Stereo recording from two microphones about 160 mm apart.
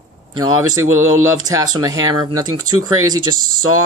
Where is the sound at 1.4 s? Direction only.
25° right (ahead or behind).